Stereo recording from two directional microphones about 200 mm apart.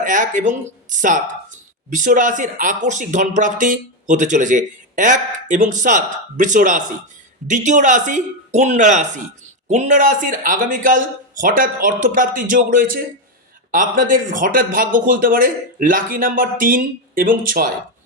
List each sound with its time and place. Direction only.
0.0 s speech: 40° right (ahead or behind)